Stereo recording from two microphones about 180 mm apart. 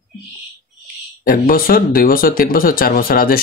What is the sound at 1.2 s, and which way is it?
Speech, 55° left (ahead or behind).